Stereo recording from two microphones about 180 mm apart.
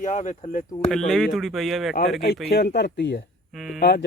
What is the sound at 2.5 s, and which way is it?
Speech, 65° left (ahead or behind).